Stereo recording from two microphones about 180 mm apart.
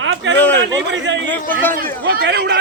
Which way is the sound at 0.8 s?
85° right.